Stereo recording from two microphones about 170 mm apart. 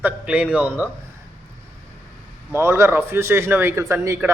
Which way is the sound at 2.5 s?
15° right (ahead or behind).